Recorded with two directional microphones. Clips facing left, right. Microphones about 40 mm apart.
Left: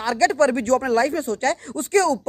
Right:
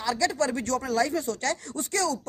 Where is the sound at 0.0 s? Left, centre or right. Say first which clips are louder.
Left 8 dB; left.